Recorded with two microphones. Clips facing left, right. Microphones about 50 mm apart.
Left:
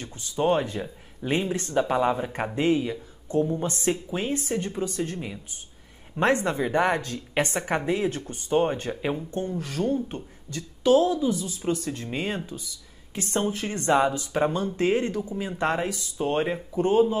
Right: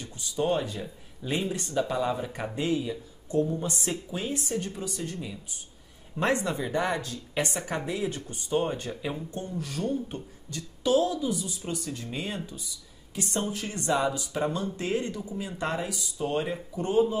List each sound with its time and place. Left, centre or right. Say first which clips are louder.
0.0 s speech: left 4 dB; left
12.4 s speech: left 3 dB; left
13.1 s speech: left 4 dB; left